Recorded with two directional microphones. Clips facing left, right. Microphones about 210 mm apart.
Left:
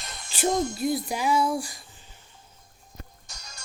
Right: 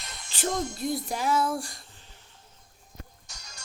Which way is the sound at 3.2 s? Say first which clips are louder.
Left 3 dB; 40° left (ahead or behind).